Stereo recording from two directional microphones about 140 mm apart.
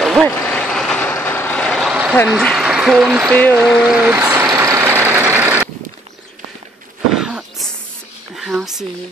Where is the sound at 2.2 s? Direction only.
5° left (ahead or behind); by 4.2 s 10° right (ahead or behind).